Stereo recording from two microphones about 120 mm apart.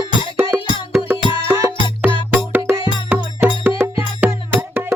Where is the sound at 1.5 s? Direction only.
25° right (ahead or behind).